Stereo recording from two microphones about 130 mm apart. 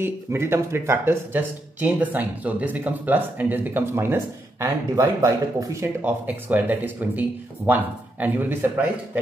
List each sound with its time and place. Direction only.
0.0 s speech: 20° right (ahead or behind)
6.0 s speech: 15° right (ahead or behind)